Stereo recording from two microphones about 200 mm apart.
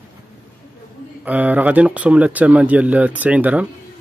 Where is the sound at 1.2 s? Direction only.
10° right (ahead or behind).